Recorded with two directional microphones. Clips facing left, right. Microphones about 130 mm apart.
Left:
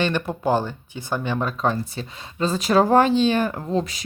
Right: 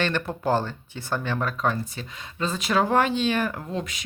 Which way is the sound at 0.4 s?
15° left (ahead or behind).